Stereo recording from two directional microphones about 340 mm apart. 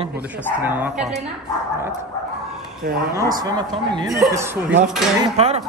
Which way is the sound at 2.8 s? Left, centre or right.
Right.